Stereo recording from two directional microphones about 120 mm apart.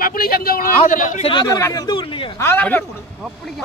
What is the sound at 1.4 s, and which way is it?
Speech, 30° left (ahead or behind).